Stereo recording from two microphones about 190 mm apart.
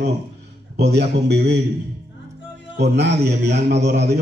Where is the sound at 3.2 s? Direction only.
60° right (ahead or behind).